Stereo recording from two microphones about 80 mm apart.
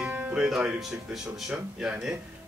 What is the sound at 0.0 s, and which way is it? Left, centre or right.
Music, centre.